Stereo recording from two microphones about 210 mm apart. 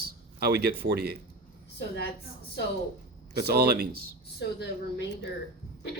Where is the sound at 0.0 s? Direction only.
50° right (ahead or behind).